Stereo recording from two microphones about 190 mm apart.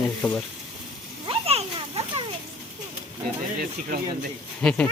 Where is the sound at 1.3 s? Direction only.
30° right (ahead or behind).